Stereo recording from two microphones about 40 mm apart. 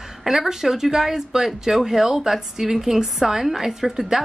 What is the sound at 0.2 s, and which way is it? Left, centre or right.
Speech, centre.